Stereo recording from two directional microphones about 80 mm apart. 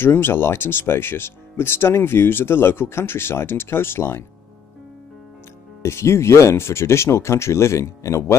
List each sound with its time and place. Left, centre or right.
0.0 s speech: left
5.8 s speech: left